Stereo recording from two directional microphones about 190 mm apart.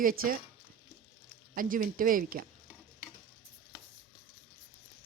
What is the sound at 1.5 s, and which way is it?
Speech, 45° right (ahead or behind).